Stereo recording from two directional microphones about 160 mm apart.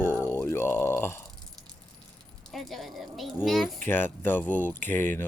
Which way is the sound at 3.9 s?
15° left (ahead or behind).